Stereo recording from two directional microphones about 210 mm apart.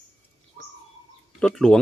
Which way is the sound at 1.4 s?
5° left (ahead or behind).